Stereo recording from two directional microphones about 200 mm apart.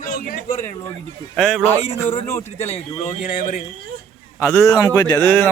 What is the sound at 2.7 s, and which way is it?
Speech, 40° left (ahead or behind).